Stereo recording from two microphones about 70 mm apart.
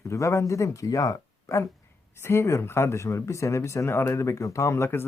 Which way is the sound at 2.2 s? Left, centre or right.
Left.